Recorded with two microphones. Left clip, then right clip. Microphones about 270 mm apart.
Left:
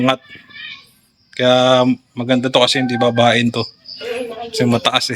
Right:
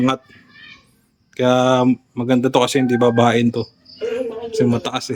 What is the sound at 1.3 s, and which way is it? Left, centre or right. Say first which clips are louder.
A man's voice: left 3 dB; centre.